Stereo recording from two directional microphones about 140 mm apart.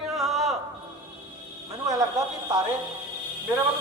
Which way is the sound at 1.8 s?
25° right (ahead or behind).